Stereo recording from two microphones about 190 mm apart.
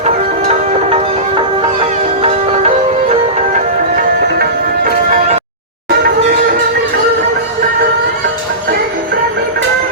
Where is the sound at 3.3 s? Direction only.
40° right (ahead or behind).